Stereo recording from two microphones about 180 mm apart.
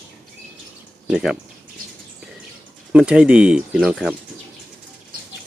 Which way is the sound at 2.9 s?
5° right (ahead or behind).